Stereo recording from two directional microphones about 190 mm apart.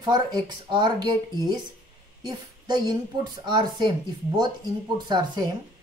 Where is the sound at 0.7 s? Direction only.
25° right (ahead or behind).